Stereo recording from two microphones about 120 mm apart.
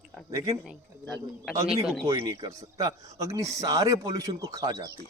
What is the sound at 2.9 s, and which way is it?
Speech, 30° right (ahead or behind).